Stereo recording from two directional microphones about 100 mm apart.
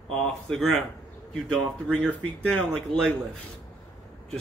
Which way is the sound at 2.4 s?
10° left (ahead or behind).